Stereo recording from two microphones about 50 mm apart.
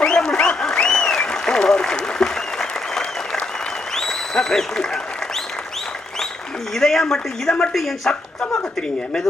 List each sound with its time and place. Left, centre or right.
0.0 s applause: left
6.7 s a woman's voice: centre